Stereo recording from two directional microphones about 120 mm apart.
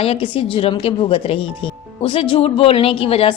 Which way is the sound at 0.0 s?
45° left (ahead or behind).